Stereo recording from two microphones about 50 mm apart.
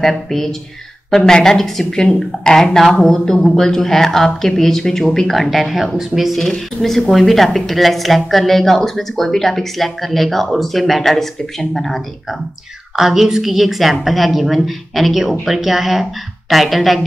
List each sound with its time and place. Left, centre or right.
0.0 s a woman's voice: centre
12.9 s a woman's voice: centre